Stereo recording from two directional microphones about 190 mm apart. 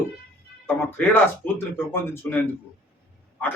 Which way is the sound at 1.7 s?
10° left (ahead or behind).